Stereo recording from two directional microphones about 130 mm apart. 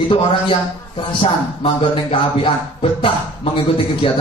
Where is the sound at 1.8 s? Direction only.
40° left (ahead or behind).